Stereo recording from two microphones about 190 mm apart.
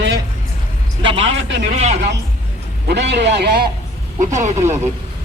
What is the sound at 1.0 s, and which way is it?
A man's voice, 25° right (ahead or behind).